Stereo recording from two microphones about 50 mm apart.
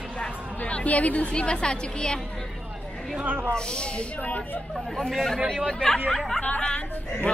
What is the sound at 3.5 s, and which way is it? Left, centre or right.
Speech, centre.